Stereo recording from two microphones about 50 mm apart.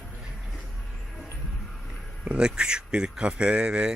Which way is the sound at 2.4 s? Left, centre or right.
Centre.